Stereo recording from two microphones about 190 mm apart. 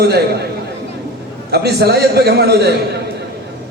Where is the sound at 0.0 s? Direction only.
55° right (ahead or behind).